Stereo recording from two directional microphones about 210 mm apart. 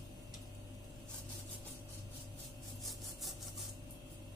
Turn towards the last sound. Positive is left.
turn(degrees=0)  # may be behind; listen again after turning